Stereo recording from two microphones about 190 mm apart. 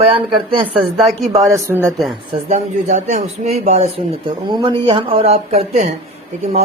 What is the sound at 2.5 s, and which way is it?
A man's voice, 40° right (ahead or behind).